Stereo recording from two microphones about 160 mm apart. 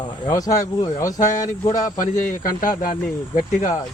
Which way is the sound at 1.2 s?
55° left (ahead or behind).